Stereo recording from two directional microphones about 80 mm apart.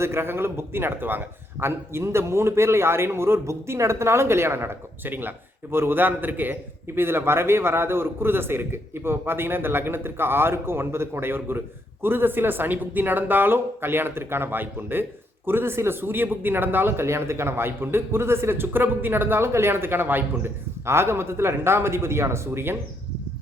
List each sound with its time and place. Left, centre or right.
0.0 s a man's voice: right